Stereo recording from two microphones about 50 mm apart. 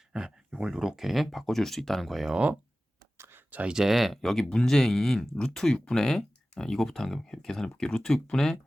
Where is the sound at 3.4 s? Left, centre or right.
Right.